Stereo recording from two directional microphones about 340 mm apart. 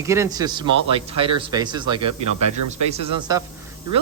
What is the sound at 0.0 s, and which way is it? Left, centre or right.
Speech, centre.